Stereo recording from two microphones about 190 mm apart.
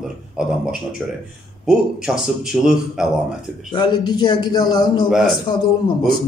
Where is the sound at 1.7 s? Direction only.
5° right (ahead or behind).